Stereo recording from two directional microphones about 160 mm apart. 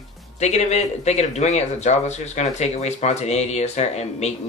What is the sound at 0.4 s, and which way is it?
Speech, 45° left (ahead or behind).